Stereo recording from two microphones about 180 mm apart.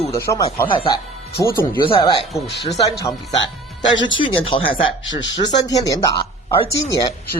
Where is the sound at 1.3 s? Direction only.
15° left (ahead or behind).